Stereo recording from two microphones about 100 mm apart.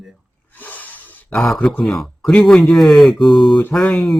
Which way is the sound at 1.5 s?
15° left (ahead or behind).